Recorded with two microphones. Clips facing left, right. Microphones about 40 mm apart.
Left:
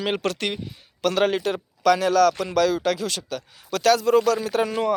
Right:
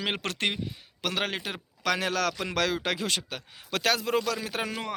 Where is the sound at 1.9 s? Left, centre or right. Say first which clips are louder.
Left 10 dB; right.